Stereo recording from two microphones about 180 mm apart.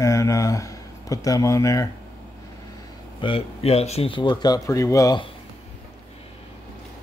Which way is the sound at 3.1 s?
30° left (ahead or behind).